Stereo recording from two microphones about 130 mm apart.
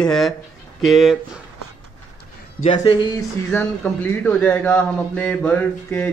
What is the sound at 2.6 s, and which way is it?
Speech, 65° left (ahead or behind).